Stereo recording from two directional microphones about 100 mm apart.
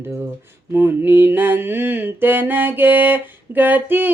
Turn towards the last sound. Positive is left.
turn(degrees=-20)  # may be behind; listen again after turning